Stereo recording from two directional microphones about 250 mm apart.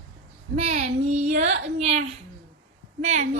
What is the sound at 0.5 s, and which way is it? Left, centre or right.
A woman's voice, right.